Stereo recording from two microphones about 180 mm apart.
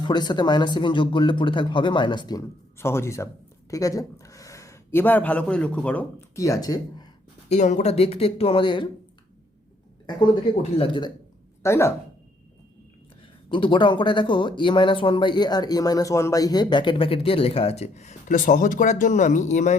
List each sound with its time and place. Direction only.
0.0 s speech: 25° left (ahead or behind)
7.5 s speech: 40° left (ahead or behind)
10.1 s speech: 25° left (ahead or behind)
11.6 s speech: 15° left (ahead or behind)
13.5 s speech: 25° left (ahead or behind)